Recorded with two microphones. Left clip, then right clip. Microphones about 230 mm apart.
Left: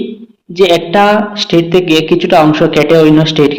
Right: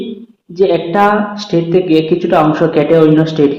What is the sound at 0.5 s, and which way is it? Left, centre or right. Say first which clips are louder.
A man's voice: left 3 dB; left.